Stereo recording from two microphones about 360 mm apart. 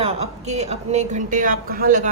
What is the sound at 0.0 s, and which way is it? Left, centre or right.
Speech, centre.